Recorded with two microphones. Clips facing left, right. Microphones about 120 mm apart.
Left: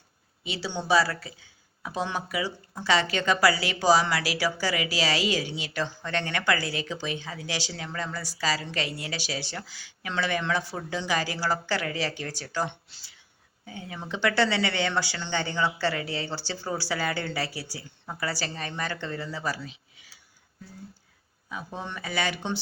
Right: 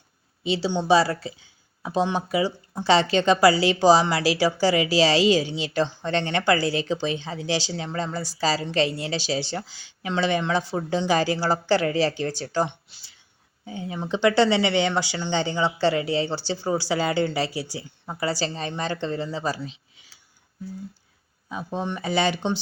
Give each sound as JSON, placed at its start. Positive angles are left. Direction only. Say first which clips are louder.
{"t": 0.4, "sound": "speech", "louder": "right 7 dB", "side_deg": -25}
{"t": 12.9, "sound": "a sound", "louder": "even", "side_deg": -20}
{"t": 13.7, "sound": "speech", "louder": "right 7 dB", "side_deg": -25}
{"t": 21.5, "sound": "speech", "louder": "right 7 dB", "side_deg": -25}